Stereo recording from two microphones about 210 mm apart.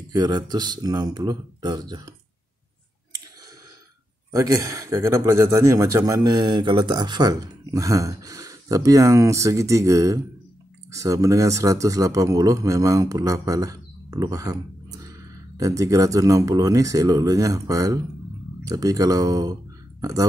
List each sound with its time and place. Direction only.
0.1 s speech: 20° right (ahead or behind)
4.3 s speech: 15° right (ahead or behind)